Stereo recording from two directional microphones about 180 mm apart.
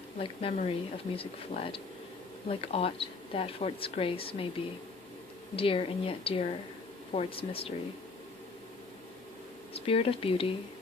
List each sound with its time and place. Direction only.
0.2 s speech: 30° left (ahead or behind)
9.7 s speech: 30° left (ahead or behind)